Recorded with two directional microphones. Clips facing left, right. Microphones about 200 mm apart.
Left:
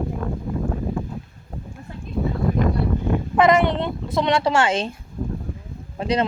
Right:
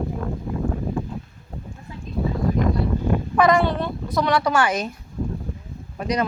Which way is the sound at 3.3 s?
20° left (ahead or behind).